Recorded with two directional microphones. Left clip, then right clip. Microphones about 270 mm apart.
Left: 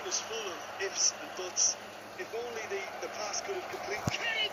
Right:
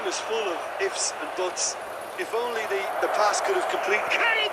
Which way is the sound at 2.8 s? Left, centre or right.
Right.